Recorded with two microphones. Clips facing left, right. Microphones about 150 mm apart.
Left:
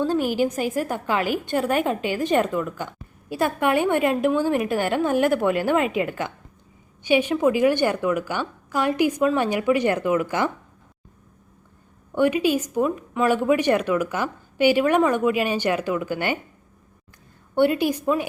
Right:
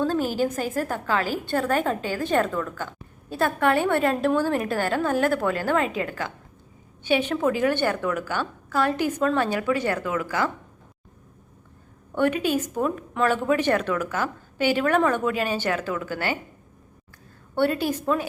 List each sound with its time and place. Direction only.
0.0 s a sound: 10° left (ahead or behind)
0.3 s a woman's voice: 15° left (ahead or behind)
12.1 s speech: 10° left (ahead or behind)
17.5 s speech: 15° left (ahead or behind)